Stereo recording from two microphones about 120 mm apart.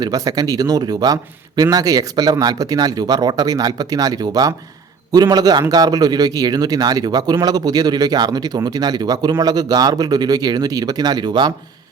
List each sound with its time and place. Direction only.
0.0 s a man's voice: 30° right (ahead or behind)